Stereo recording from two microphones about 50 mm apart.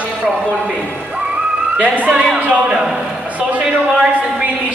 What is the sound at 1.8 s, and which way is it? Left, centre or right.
Speech, right.